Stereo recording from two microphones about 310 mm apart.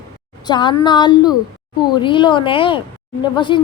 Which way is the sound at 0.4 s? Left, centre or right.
Centre.